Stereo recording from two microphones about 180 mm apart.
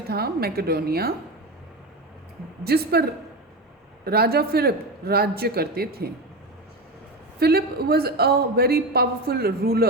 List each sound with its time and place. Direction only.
0.1 s a woman's voice: 60° right (ahead or behind)
2.6 s a woman's voice: 60° right (ahead or behind)
7.3 s a woman's voice: 60° right (ahead or behind)